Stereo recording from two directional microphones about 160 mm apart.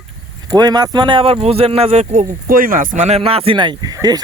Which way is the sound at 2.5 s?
65° right (ahead or behind).